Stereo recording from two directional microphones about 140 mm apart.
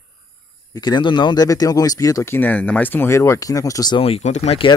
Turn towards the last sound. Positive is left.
turn(degrees=50)  # may be behind; listen again after turning